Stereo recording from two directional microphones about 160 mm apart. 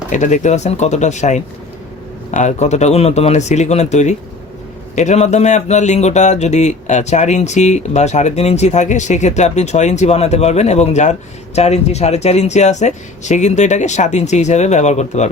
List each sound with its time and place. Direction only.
0.1 s speech: 50° left (ahead or behind)